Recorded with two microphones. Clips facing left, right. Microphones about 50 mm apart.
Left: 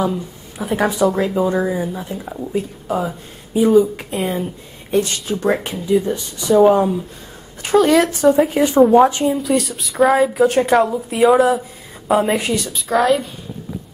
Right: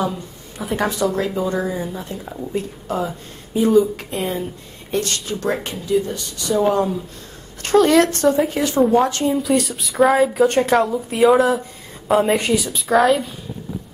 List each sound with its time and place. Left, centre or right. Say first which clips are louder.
0.6 s speech: left 3 dB; centre
0.8 s speech: left 4 dB; centre
7.6 s speech: even; centre
8.5 s speech: left 5 dB; centre
9.3 s speech: even; centre